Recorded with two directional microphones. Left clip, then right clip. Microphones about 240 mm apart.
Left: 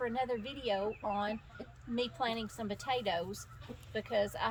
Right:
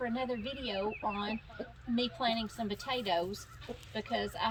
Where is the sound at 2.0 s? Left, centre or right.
Centre.